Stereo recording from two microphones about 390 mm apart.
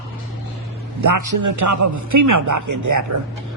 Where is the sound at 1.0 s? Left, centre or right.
Right.